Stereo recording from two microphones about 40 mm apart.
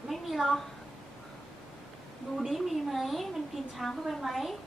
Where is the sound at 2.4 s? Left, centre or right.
Centre.